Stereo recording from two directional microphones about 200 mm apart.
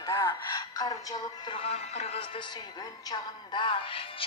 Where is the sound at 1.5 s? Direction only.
30° left (ahead or behind).